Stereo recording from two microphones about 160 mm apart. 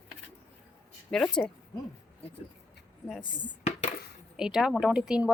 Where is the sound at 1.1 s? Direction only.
5° left (ahead or behind).